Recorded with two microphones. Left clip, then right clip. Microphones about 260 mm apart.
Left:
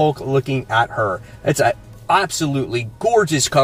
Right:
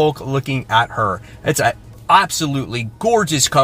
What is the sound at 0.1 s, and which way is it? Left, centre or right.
Speech, centre.